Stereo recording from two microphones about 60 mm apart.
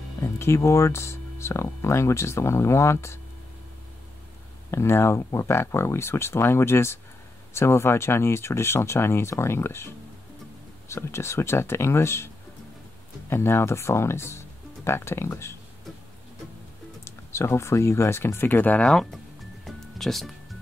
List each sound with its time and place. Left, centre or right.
0.2 s speech: left
4.6 s speech: left
13.3 s speech: left
17.0 s speech: left
18.8 s speech: centre
19.6 s music: centre